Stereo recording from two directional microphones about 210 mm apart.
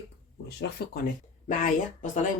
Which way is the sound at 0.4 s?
50° left (ahead or behind).